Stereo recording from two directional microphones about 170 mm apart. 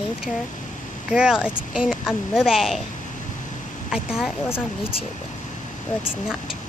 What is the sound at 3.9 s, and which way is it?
Speech, 5° right (ahead or behind).